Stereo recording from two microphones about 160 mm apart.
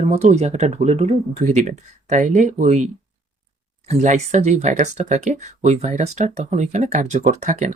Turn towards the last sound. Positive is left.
turn(degrees=-50)  # may be behind; listen again after turning